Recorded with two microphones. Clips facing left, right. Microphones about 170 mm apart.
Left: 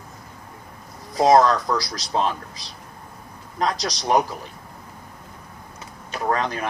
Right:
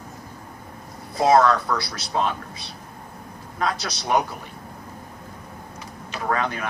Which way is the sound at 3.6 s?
35° left (ahead or behind).